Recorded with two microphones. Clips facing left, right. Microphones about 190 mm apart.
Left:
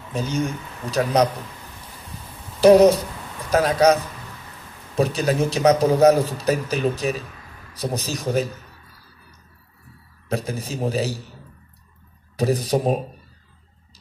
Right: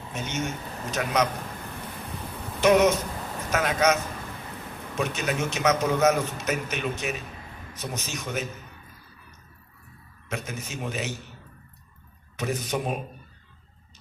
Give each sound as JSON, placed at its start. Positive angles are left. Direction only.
{"t": 0.1, "sound": "a man's voice", "side_deg": 35}
{"t": 2.6, "sound": "a man's voice", "side_deg": 35}
{"t": 10.2, "sound": "a man's voice", "side_deg": 35}
{"t": 12.4, "sound": "a man's voice", "side_deg": 35}